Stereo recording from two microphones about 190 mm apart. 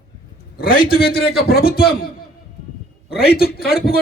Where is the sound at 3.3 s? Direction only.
55° left (ahead or behind).